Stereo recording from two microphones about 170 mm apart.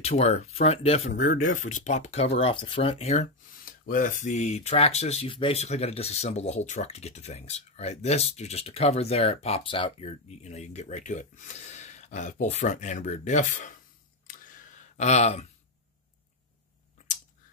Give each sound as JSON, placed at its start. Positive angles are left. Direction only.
{"t": 0.0, "sound": "speech", "side_deg": 40}
{"t": 1.1, "sound": "speech", "side_deg": 50}
{"t": 3.6, "sound": "speech", "side_deg": 55}
{"t": 14.2, "sound": "a sound", "side_deg": 50}